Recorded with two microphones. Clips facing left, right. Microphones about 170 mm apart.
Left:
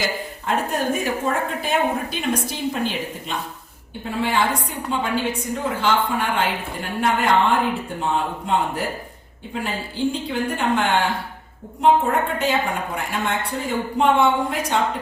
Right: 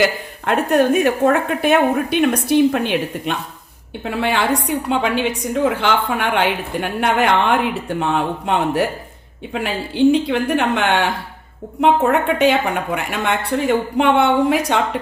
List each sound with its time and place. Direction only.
0.0 s a woman's voice: 70° right (ahead or behind)